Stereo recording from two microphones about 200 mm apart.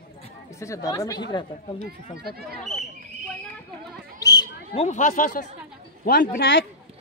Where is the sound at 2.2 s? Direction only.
50° right (ahead or behind).